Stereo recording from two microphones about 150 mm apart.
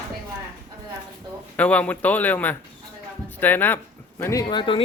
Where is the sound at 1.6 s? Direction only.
10° left (ahead or behind); by 4.8 s 35° left (ahead or behind).